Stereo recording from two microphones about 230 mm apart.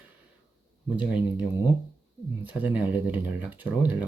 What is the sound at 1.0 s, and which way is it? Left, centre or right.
Speech, centre.